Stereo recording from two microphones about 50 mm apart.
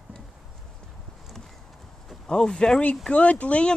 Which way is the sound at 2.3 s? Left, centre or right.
Centre.